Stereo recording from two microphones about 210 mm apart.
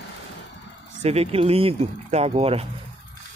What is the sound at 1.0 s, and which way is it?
Speech, 30° right (ahead or behind).